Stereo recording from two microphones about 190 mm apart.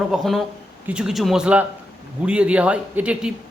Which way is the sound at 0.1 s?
Centre (ahead or behind).